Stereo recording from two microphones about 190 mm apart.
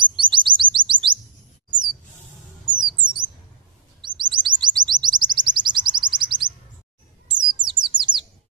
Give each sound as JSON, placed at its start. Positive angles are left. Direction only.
{"t": 0.2, "sound": "chirp", "side_deg": -25}
{"t": 2.7, "sound": "bird", "side_deg": -25}
{"t": 4.0, "sound": "chirp", "side_deg": -25}
{"t": 7.2, "sound": "bird", "side_deg": -25}